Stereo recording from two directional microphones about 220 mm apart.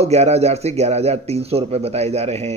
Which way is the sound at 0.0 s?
30° right (ahead or behind).